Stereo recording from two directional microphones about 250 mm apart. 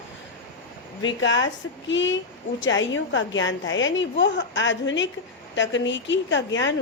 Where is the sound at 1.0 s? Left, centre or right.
Left.